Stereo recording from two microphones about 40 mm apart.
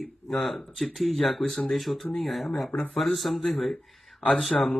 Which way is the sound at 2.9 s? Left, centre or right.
Centre.